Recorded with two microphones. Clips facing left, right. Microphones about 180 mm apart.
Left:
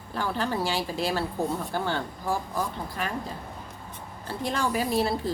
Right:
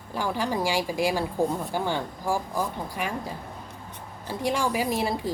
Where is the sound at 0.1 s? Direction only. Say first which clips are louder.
Right 1 dB; 10° right (ahead or behind).